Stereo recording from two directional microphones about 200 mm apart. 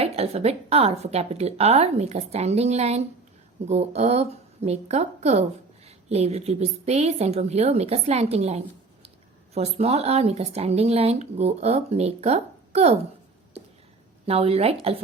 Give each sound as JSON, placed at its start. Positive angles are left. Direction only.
{"t": 0.0, "sound": "speech", "side_deg": -30}
{"t": 14.3, "sound": "a woman's voice", "side_deg": -30}